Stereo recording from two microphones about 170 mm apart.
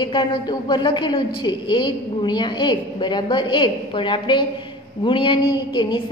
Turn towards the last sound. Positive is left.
turn(degrees=25)  # may be behind; listen again after turning